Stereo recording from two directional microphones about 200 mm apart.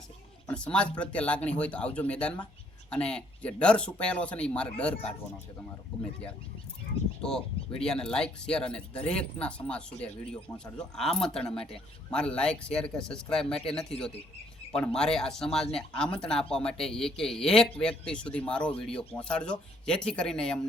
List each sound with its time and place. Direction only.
0.4 s speech: 5° left (ahead or behind)
7.2 s speech: 5° left (ahead or behind)